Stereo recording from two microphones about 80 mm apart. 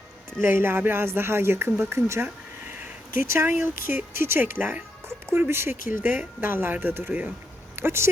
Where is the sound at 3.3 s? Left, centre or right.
Right.